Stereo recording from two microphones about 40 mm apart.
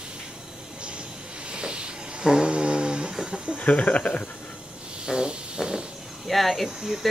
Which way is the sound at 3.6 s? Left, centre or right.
Left.